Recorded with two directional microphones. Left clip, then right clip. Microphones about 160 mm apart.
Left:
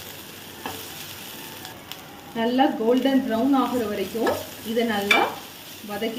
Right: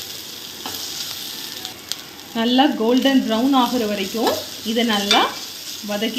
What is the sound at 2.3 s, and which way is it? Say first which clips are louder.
Speech: right 4 dB; 40° right (ahead or behind).